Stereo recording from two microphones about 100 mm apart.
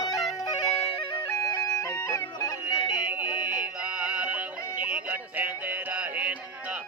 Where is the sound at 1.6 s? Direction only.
35° left (ahead or behind).